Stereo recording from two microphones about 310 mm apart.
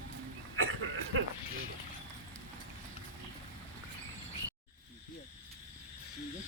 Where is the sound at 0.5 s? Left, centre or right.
Right.